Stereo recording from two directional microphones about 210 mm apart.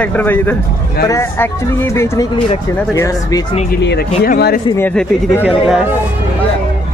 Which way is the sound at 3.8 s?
45° left (ahead or behind).